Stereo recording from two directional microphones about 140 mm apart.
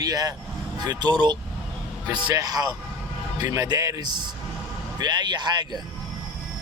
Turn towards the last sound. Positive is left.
turn(degrees=-30)  # may be behind; listen again after turning